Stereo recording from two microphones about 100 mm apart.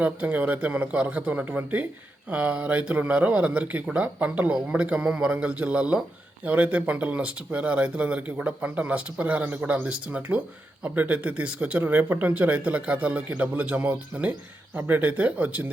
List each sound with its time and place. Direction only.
0.0 s speech: 15° right (ahead or behind)